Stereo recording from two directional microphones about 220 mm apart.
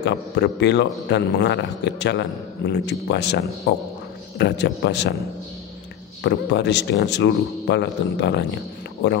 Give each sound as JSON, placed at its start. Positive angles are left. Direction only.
{"t": 0.0, "sound": "a man's voice", "side_deg": 50}
{"t": 6.2, "sound": "a man's voice", "side_deg": 50}